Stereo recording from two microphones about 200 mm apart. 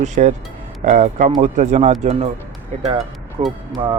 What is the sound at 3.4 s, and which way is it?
Speech, 30° right (ahead or behind).